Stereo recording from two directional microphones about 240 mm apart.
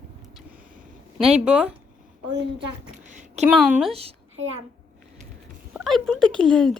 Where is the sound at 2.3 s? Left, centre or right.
Right.